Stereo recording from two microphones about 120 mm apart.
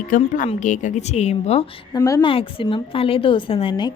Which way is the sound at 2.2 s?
45° left (ahead or behind).